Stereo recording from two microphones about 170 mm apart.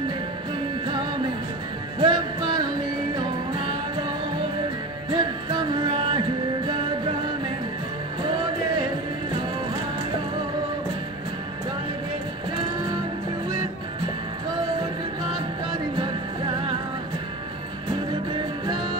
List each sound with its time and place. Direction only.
2.0 s music: 30° right (ahead or behind)
5.1 s music: 25° right (ahead or behind)